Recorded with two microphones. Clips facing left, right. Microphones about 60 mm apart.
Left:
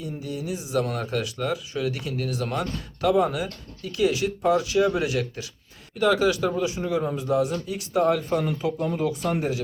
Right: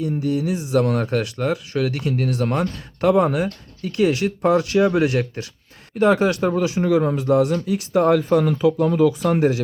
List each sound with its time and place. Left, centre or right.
0.0 s speech: right
1.7 s speech: right
6.6 s speech: right